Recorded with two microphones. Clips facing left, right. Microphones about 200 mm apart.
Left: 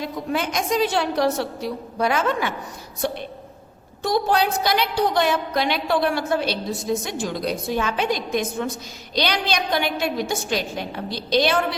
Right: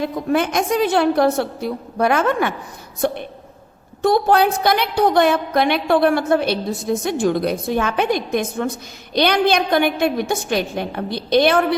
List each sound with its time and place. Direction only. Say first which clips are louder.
0.0 s a woman's voice: right 6 dB; 50° right (ahead or behind)